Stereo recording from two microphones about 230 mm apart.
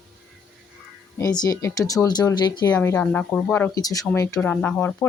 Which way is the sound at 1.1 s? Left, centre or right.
Centre.